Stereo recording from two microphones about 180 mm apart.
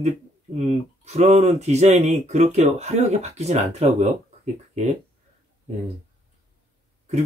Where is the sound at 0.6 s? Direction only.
40° right (ahead or behind).